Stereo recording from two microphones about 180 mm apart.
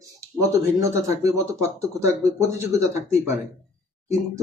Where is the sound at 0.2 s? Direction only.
15° right (ahead or behind).